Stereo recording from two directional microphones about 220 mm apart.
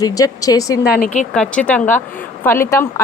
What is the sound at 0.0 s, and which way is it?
Speech, 15° left (ahead or behind).